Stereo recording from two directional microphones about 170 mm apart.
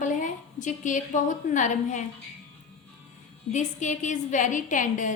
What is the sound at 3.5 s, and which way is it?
A woman's voice, 45° left (ahead or behind).